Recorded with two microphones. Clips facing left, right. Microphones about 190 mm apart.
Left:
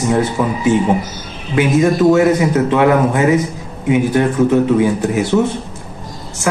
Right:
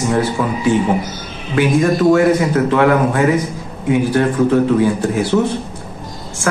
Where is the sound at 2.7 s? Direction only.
20° left (ahead or behind).